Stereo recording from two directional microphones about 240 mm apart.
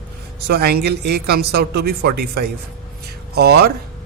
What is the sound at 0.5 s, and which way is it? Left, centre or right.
Speech, right.